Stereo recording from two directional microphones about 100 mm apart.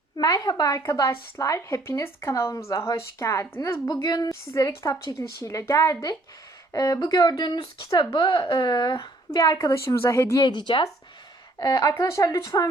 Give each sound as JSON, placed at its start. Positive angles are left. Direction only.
{"t": 0.2, "sound": "speech", "side_deg": 40}
{"t": 4.0, "sound": "a woman's voice", "side_deg": 40}
{"t": 9.4, "sound": "a woman's voice", "side_deg": 30}
{"t": 10.4, "sound": "a woman's voice", "side_deg": 50}
{"t": 11.6, "sound": "speech", "side_deg": 35}